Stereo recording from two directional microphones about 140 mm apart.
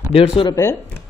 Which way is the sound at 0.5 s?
25° left (ahead or behind).